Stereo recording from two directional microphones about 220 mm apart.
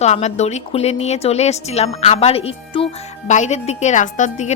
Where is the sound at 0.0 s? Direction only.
30° left (ahead or behind).